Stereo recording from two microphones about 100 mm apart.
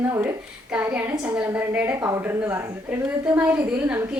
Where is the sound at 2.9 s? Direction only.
15° right (ahead or behind).